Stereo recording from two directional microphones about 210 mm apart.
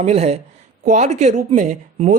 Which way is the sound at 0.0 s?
30° right (ahead or behind).